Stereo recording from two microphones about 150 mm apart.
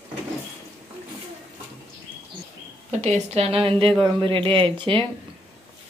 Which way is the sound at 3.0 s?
45° right (ahead or behind).